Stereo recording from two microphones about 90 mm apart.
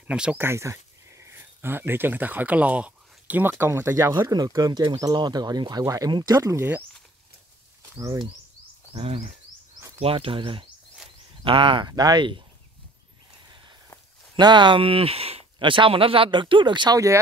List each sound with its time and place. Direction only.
0.0 s speech: 10° right (ahead or behind)
0.4 s speech: 30° right (ahead or behind)
3.9 s speech: 45° right (ahead or behind)
6.4 s speech: 30° right (ahead or behind)
8.9 s speech: 90° right; by 11.9 s 70° right (ahead or behind)
11.9 s speech: 45° right (ahead or behind)
14.3 s speech: 60° right (ahead or behind)
16.9 s speech: 35° right (ahead or behind)